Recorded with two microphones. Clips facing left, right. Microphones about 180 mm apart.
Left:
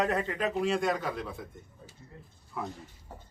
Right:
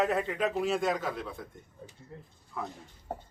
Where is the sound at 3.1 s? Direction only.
60° right (ahead or behind).